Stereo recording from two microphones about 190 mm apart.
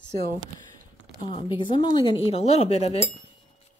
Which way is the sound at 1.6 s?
25° left (ahead or behind).